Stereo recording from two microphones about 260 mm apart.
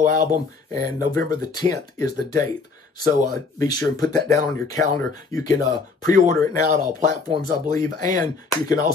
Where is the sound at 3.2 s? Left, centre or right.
Centre.